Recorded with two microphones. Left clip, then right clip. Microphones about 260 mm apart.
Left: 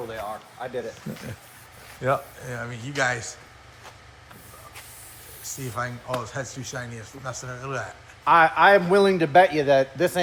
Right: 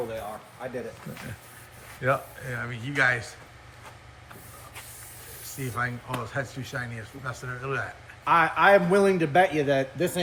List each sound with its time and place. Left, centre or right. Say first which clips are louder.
0.6 s a man's voice: left 2 dB; left
2.0 s speech: left 1 dB; centre
5.5 s speech: even; centre
8.2 s a man's voice: left 4 dB; left